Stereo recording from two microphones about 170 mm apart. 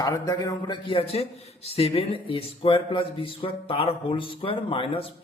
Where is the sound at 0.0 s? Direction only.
20° left (ahead or behind).